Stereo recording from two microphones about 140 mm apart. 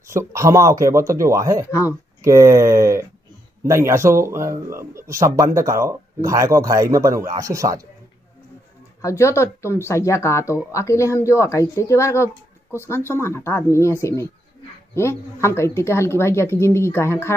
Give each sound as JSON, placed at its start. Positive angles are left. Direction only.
{"t": 0.1, "sound": "speech", "side_deg": -20}
{"t": 1.7, "sound": "speech", "side_deg": 20}
{"t": 2.2, "sound": "speech", "side_deg": -20}
{"t": 9.0, "sound": "speech", "side_deg": 20}